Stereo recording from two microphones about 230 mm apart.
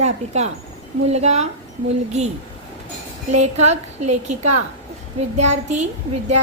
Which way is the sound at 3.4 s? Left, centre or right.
Right.